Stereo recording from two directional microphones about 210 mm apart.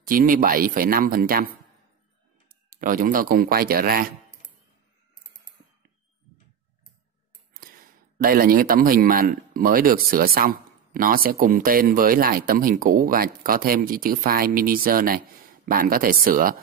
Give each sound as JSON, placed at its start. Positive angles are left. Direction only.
{"t": 0.0, "sound": "a man's voice", "side_deg": -40}
{"t": 2.7, "sound": "a man's voice", "side_deg": -40}
{"t": 8.2, "sound": "a man's voice", "side_deg": -45}